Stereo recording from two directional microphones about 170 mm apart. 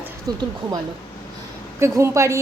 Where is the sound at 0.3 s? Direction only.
25° right (ahead or behind).